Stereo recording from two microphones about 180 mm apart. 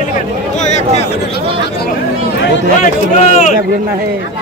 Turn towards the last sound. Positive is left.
turn(degrees=40)  # may be behind; listen again after turning